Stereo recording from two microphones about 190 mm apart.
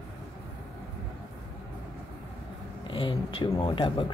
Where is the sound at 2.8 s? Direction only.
25° left (ahead or behind).